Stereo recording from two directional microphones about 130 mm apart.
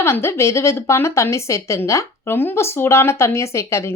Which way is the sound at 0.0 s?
20° left (ahead or behind).